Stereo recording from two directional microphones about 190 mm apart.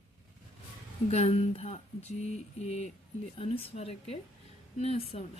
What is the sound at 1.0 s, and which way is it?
Speech, 35° left (ahead or behind).